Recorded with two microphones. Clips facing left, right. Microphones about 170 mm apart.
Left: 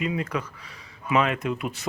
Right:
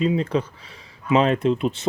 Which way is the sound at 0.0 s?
30° right (ahead or behind).